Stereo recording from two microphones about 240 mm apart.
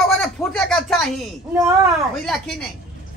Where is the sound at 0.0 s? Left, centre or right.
Centre.